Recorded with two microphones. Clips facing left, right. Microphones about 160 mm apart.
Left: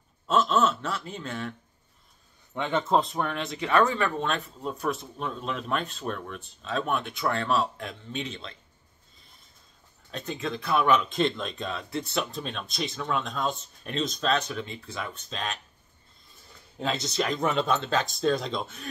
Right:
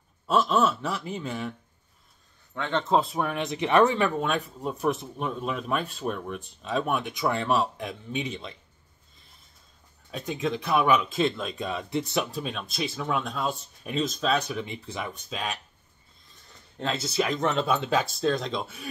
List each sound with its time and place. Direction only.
0.3 s speech: 10° right (ahead or behind)
2.5 s speech: 15° left (ahead or behind)
2.9 s speech: 5° right (ahead or behind)
10.1 s speech: 10° right (ahead or behind)
16.7 s speech: centre (ahead or behind)
17.6 s speech: 10° right (ahead or behind)